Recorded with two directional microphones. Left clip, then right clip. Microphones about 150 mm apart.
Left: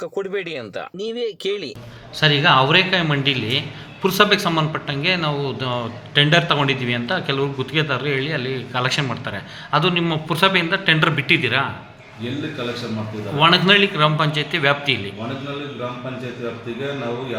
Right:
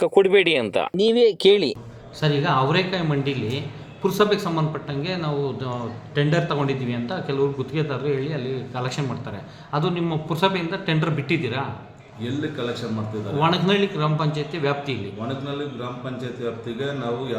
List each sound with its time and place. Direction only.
0.0 s speech: 15° right (ahead or behind)
2.2 s a man's voice: 5° left (ahead or behind)
13.4 s a man's voice: centre (ahead or behind)